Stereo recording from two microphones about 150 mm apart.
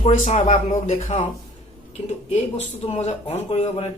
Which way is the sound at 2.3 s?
45° left (ahead or behind).